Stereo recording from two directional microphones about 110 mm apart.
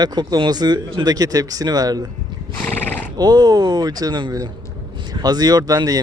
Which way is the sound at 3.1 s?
40° right (ahead or behind).